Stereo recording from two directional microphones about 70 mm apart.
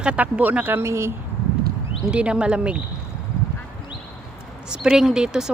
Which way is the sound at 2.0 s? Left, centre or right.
Centre.